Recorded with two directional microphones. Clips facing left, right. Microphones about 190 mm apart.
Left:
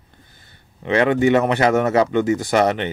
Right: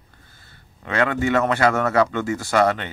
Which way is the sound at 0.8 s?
20° left (ahead or behind).